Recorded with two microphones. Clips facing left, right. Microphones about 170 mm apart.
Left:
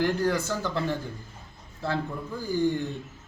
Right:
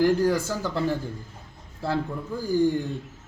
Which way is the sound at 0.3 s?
10° right (ahead or behind).